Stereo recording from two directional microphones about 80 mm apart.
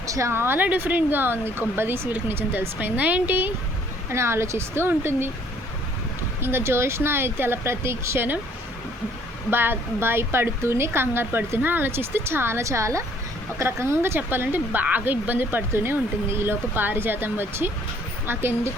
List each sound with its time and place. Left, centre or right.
0.1 s speech: right
4.1 s speech: right
6.4 s speech: right
9.5 s speech: right